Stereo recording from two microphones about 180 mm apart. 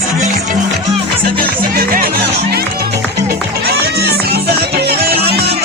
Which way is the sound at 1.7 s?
55° right (ahead or behind).